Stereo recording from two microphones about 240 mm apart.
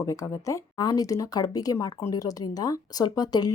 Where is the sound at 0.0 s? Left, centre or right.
Centre.